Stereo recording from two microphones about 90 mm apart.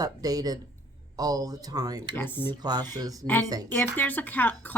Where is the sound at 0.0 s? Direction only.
45° right (ahead or behind).